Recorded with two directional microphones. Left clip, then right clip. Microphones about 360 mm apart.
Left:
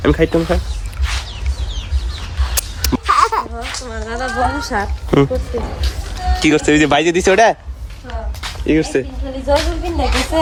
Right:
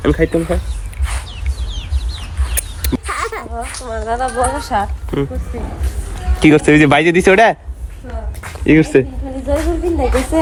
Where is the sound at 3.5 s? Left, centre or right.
Centre.